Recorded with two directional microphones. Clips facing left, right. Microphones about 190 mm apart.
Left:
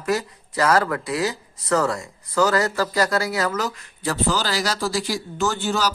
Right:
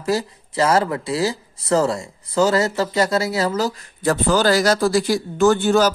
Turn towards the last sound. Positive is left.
turn(degrees=-55)  # may be behind; listen again after turning